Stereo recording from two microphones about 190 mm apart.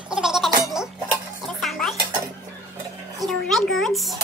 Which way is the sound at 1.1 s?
Centre (ahead or behind).